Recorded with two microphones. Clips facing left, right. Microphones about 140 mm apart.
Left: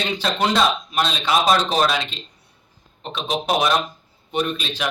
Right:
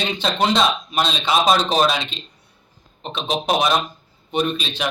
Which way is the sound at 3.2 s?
20° right (ahead or behind).